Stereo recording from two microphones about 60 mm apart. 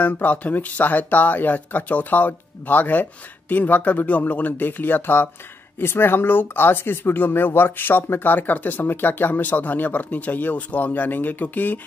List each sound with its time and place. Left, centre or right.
0.0 s speech: left